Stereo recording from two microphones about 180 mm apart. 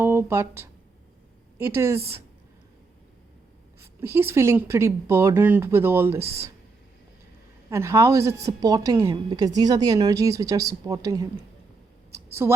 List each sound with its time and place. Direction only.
0.0 s speech: 15° right (ahead or behind)
3.8 s speech: 15° right (ahead or behind)
7.7 s a woman's voice: 15° right (ahead or behind)
12.1 s a sound: 15° right (ahead or behind)